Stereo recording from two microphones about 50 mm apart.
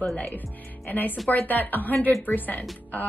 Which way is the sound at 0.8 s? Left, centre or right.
Left.